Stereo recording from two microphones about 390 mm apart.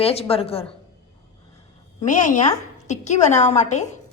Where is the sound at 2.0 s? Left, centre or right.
Centre.